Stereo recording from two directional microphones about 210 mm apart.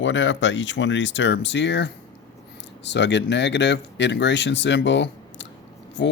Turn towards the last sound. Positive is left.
turn(degrees=60)  # may be behind; listen again after turning